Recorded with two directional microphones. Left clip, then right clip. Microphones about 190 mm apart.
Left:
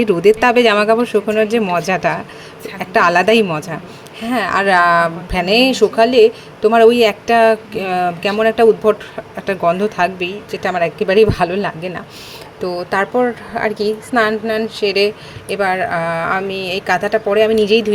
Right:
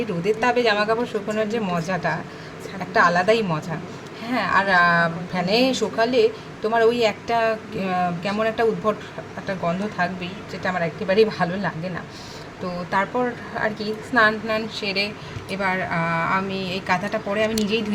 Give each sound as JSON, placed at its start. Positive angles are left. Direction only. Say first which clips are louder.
{"t": 0.0, "sound": "a woman's voice", "louder": "left 10 dB", "side_deg": 45}